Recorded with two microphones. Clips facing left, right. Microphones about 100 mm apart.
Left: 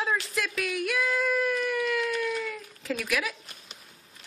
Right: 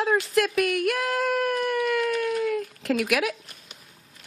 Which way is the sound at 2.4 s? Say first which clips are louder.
Right 9 dB; 65° right (ahead or behind).